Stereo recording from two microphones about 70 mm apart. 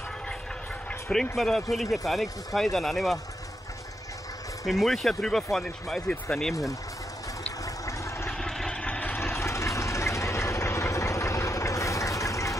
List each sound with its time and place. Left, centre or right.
1.3 s speech: centre
4.6 s speech: centre
7.6 s a sound: left
8.3 s vehicle: centre; by 12.5 s left